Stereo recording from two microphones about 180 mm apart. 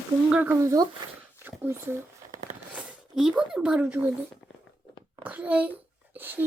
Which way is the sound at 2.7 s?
5° right (ahead or behind).